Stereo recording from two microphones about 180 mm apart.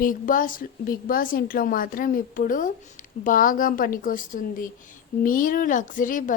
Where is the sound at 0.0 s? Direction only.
50° left (ahead or behind).